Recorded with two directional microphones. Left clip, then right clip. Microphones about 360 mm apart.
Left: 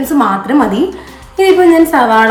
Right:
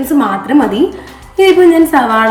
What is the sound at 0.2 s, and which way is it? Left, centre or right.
A woman's voice, centre.